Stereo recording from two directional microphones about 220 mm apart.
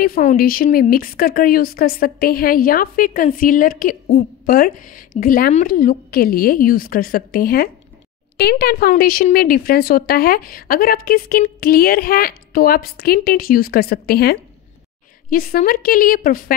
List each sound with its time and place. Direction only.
0.0 s a woman's voice: 40° left (ahead or behind)